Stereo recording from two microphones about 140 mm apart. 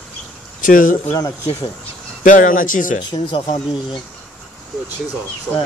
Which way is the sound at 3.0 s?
35° left (ahead or behind).